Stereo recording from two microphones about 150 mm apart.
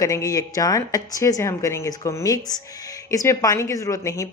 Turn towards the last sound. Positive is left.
turn(degrees=20)  # may be behind; listen again after turning